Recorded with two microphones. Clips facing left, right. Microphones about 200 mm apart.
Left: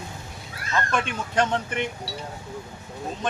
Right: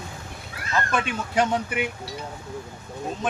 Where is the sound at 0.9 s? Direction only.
5° right (ahead or behind).